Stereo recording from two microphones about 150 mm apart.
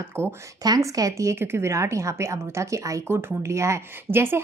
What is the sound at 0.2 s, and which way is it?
A woman's voice, 15° right (ahead or behind).